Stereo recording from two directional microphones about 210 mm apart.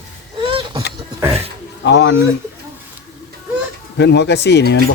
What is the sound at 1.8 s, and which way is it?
Speech, 60° left (ahead or behind).